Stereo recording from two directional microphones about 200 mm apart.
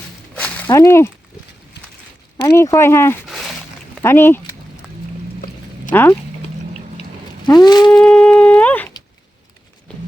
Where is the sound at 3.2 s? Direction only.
Centre (ahead or behind).